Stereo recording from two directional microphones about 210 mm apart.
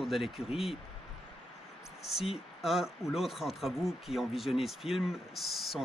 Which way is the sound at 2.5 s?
Centre (ahead or behind).